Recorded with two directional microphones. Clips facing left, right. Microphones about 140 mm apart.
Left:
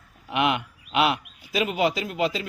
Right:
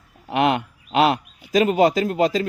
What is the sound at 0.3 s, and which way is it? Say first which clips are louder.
Speech: right 4 dB; 40° right (ahead or behind).